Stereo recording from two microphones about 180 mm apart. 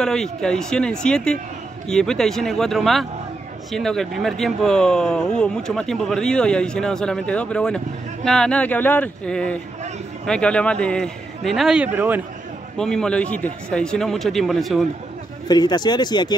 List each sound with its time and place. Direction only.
0.0 s speech: 5° left (ahead or behind)
12.7 s speech: 5° left (ahead or behind)
15.4 s speech: 20° left (ahead or behind)